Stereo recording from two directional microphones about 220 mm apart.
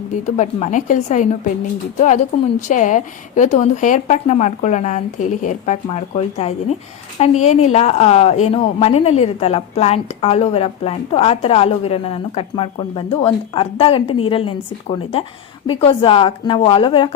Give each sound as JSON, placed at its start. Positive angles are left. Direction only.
{"t": 0.3, "sound": "a woman's voice", "side_deg": 30}